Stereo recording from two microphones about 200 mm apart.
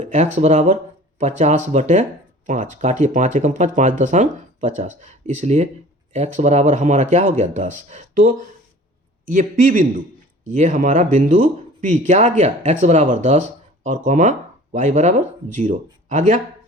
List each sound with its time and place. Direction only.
0.0 s a man's voice: 35° right (ahead or behind)